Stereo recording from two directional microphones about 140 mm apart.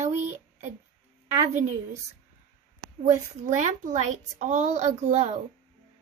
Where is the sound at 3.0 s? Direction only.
60° right (ahead or behind).